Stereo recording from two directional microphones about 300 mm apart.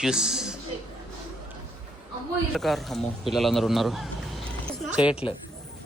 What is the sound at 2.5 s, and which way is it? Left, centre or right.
Speech, centre.